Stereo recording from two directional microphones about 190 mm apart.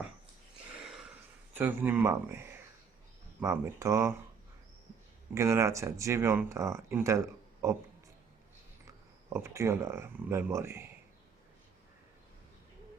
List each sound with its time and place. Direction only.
1.5 s speech: 10° right (ahead or behind)
5.3 s speech: 15° right (ahead or behind)
9.3 s speech: 15° right (ahead or behind)